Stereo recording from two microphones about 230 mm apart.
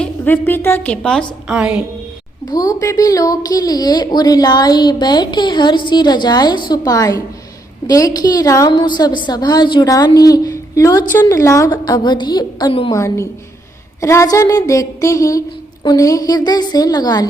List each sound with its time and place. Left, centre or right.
0.0 s a woman's voice: centre
2.5 s a woman's voice: centre